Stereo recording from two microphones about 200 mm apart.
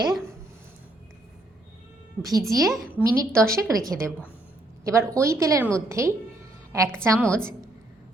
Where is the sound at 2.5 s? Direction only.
15° right (ahead or behind).